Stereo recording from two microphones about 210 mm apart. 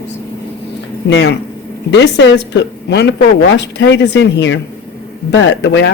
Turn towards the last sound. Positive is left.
turn(degrees=55)  # may be behind; listen again after turning